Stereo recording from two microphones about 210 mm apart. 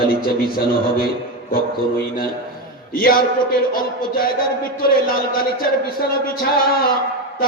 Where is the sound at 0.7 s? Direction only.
45° left (ahead or behind).